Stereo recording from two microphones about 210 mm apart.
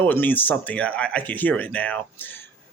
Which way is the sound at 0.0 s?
10° left (ahead or behind).